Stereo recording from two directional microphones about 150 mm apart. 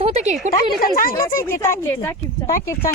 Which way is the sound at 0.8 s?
70° left (ahead or behind).